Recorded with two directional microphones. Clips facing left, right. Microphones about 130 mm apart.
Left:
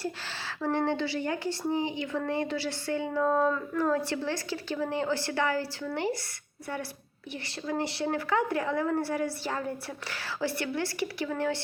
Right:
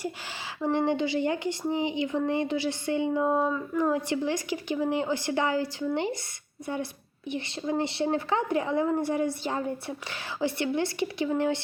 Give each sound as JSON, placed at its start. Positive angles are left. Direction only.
{"t": 0.6, "sound": "speech", "side_deg": -15}
{"t": 7.3, "sound": "speech", "side_deg": -20}